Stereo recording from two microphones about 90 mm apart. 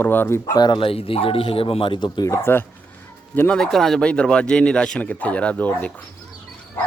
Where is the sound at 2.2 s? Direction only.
30° left (ahead or behind).